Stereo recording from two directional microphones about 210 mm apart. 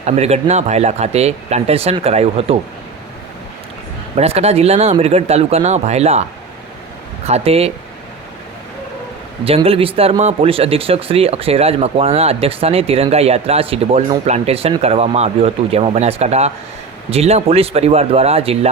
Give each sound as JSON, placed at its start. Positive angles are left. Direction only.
{"t": 0.0, "sound": "speech", "side_deg": -30}
{"t": 4.2, "sound": "speech", "side_deg": -30}
{"t": 7.3, "sound": "speech", "side_deg": -30}
{"t": 9.4, "sound": "speech", "side_deg": -30}